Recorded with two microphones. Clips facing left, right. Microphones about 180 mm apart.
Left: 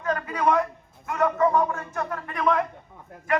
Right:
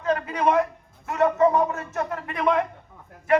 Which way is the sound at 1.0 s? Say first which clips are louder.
Right 3 dB; 25° right (ahead or behind).